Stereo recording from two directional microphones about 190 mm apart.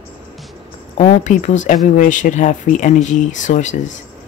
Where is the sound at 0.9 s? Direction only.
40° left (ahead or behind).